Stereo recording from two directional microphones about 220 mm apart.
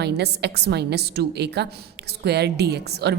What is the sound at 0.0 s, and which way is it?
A woman's voice, 50° right (ahead or behind).